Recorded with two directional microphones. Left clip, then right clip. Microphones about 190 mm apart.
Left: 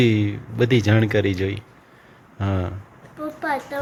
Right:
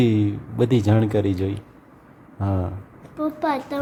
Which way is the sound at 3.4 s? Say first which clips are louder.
Left 1 dB; 30° right (ahead or behind).